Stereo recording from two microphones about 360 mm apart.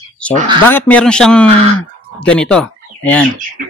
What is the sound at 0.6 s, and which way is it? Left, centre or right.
A man's voice, centre.